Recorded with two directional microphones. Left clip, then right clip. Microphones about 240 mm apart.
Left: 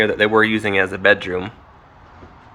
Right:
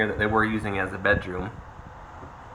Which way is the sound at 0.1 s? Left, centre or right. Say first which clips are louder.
Left 8 dB; left.